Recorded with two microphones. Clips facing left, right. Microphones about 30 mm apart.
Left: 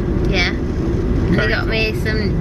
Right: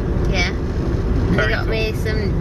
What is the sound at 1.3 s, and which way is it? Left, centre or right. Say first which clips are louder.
Speech: left 1 dB; left.